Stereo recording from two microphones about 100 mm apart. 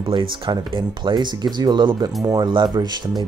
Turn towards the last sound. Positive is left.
turn(degrees=-45)  # may be behind; listen again after turning